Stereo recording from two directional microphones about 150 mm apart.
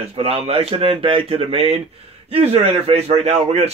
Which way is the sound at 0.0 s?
40° right (ahead or behind).